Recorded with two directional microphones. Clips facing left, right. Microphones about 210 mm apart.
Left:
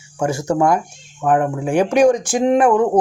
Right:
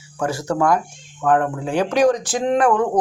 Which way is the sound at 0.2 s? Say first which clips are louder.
Left 3 dB; 15° left (ahead or behind).